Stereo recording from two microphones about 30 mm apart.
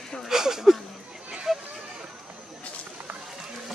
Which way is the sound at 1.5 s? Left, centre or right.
Centre.